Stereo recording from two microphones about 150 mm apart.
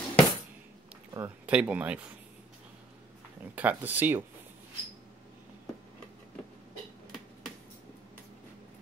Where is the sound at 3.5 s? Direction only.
10° right (ahead or behind).